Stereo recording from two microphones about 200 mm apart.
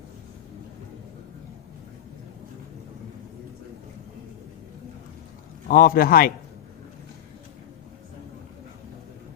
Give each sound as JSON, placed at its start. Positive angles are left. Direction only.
{"t": 5.6, "sound": "a man's voice", "side_deg": 45}